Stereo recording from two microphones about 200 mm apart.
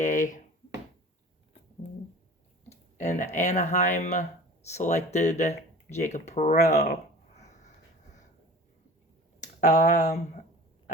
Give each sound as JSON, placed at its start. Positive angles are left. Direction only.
{"t": 0.0, "sound": "speech", "side_deg": 40}
{"t": 2.6, "sound": "speech", "side_deg": 35}
{"t": 7.3, "sound": "a sound", "side_deg": 35}
{"t": 9.4, "sound": "speech", "side_deg": 35}